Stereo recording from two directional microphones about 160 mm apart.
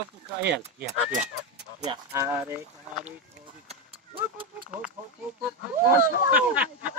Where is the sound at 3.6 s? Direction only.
35° right (ahead or behind).